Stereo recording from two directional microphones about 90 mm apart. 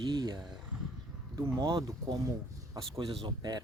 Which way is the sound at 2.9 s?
70° right (ahead or behind).